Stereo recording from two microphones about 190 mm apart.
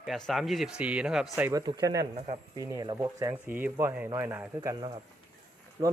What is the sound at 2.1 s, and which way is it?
Speech, 35° right (ahead or behind).